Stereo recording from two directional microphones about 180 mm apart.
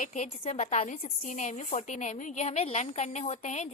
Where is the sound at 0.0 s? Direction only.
40° left (ahead or behind).